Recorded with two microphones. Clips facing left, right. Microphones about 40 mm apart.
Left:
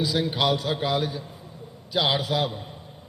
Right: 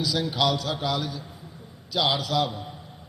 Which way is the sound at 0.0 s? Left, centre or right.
Left.